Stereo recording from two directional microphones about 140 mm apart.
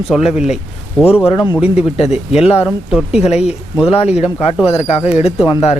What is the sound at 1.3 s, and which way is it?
Speech, 30° left (ahead or behind).